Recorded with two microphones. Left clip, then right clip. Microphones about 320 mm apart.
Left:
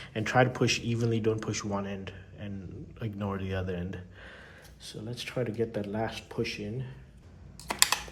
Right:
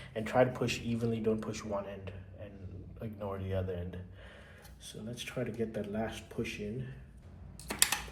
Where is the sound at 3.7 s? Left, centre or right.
Left.